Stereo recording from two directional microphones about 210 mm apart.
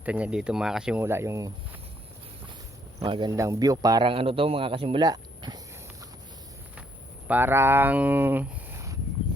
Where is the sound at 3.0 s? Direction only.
20° right (ahead or behind).